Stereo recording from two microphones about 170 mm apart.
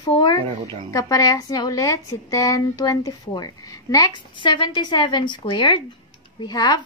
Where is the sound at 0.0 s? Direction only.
25° left (ahead or behind).